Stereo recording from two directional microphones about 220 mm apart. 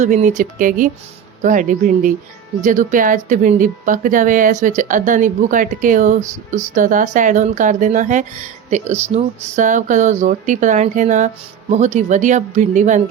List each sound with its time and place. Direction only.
0.0 s speech: 35° right (ahead or behind)